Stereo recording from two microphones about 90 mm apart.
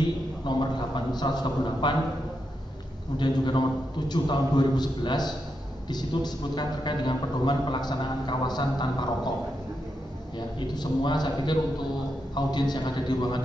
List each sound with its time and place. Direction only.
0.0 s a man's voice: 55° left (ahead or behind)
3.2 s a man's voice: 55° left (ahead or behind)
10.7 s a man's voice: 55° left (ahead or behind)